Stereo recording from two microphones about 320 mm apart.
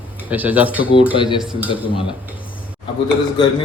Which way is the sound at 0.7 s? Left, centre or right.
Centre.